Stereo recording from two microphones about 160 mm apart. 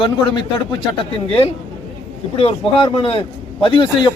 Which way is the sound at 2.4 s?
35° left (ahead or behind).